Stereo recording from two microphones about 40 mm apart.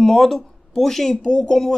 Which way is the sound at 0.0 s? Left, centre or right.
Centre.